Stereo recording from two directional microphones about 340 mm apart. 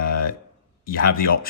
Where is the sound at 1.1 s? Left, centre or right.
Left.